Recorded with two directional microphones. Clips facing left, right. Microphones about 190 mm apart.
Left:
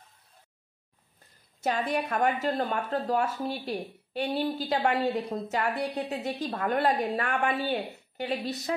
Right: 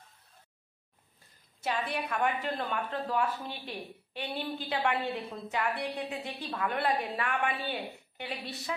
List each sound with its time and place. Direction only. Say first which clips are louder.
1.6 s a woman's voice: left 5 dB; 45° left (ahead or behind)